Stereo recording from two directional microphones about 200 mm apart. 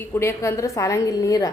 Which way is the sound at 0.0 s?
10° left (ahead or behind).